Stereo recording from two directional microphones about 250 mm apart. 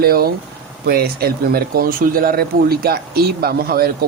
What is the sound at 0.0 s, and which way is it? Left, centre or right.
Speech, right.